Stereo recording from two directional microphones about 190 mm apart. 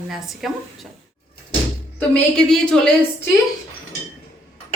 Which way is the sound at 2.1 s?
5° left (ahead or behind).